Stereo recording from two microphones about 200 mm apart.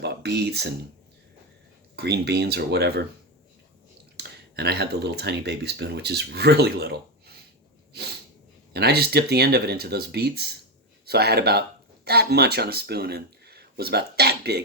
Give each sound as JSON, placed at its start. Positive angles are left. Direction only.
{"t": 0.0, "sound": "speech", "side_deg": -55}
{"t": 2.0, "sound": "speech", "side_deg": -55}
{"t": 4.2, "sound": "speech", "side_deg": -55}
{"t": 8.7, "sound": "speech", "side_deg": -50}